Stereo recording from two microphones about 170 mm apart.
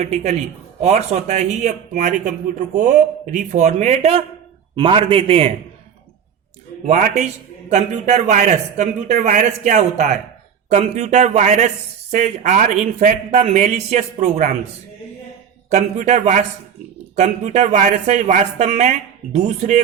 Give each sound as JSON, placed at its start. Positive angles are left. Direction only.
{"t": 0.0, "sound": "a man's voice", "side_deg": -40}
{"t": 4.7, "sound": "a man's voice", "side_deg": -30}
{"t": 6.8, "sound": "speech", "side_deg": -40}
{"t": 15.7, "sound": "a man's voice", "side_deg": -40}